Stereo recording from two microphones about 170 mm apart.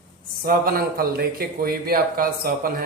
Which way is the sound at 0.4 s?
60° right (ahead or behind).